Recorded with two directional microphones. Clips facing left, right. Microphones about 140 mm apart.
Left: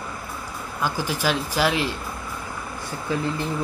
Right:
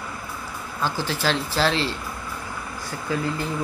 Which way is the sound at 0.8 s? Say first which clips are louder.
Even; 10° left (ahead or behind).